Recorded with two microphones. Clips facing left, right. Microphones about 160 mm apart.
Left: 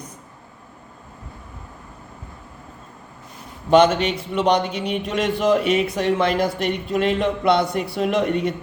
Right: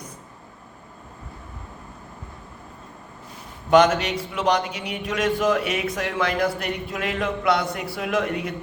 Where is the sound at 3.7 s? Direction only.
25° left (ahead or behind).